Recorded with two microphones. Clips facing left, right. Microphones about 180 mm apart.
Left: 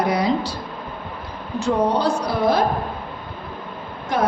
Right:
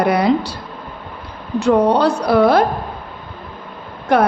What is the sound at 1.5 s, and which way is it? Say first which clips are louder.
A woman's voice: right 6 dB; 65° right (ahead or behind).